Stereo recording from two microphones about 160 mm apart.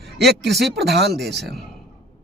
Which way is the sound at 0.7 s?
90° right.